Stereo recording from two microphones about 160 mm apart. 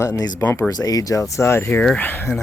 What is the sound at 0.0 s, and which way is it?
Speech, 25° left (ahead or behind).